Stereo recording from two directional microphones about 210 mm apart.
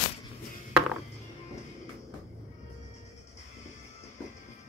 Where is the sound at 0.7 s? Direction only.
5° right (ahead or behind).